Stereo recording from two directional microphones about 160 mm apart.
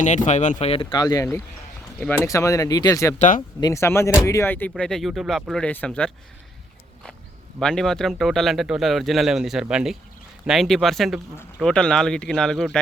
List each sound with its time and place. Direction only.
0.3 s speech: 50° left (ahead or behind)
0.7 s speech: 30° left (ahead or behind)
3.2 s speech: 55° left (ahead or behind)
3.6 s speech: 20° left (ahead or behind)
7.6 s speech: 5° left (ahead or behind)